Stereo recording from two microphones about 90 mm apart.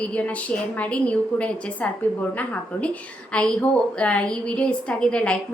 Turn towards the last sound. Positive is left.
turn(degrees=10)  # may be behind; listen again after turning